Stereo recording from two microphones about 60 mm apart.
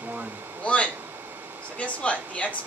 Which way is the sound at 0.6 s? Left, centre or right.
Left.